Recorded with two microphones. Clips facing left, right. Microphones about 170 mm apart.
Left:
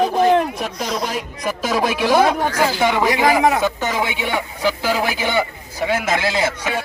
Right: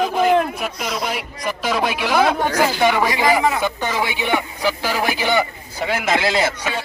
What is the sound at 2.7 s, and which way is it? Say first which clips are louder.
Speech: right 1 dB; 15° right (ahead or behind).